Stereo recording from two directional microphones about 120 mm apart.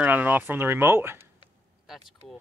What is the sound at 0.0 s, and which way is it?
Speech, 15° right (ahead or behind).